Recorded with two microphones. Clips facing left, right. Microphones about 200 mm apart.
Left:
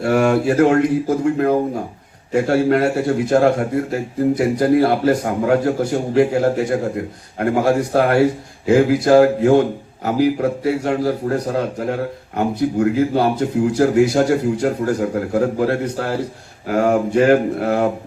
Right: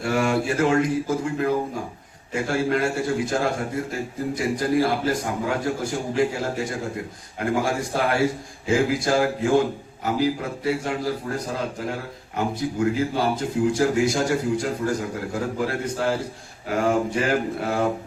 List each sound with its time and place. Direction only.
0.0 s a man's voice: 60° left (ahead or behind)
12.4 s a man's voice: 60° left (ahead or behind)